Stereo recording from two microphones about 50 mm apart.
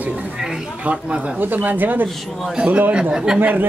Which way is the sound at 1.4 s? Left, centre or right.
Right.